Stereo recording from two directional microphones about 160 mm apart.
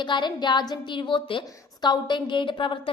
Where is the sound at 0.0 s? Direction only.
30° left (ahead or behind).